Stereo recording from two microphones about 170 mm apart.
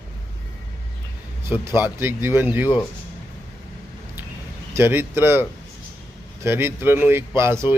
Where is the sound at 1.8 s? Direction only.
10° right (ahead or behind).